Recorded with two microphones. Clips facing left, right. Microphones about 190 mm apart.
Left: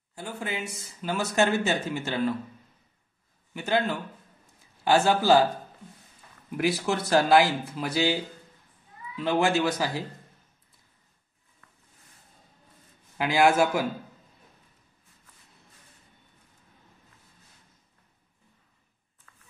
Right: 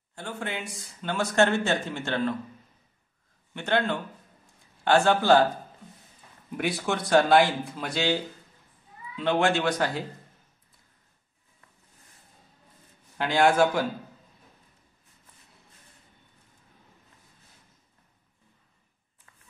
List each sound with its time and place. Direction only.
0.1 s speech: 5° left (ahead or behind)
3.5 s speech: 5° left (ahead or behind)
6.5 s speech: centre (ahead or behind)
13.2 s a man's voice: 5° left (ahead or behind)
19.3 s a sound: 25° right (ahead or behind)